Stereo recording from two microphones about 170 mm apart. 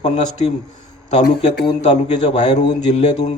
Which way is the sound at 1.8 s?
40° left (ahead or behind).